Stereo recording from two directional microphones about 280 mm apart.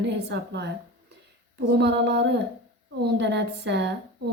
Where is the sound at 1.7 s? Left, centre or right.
Right.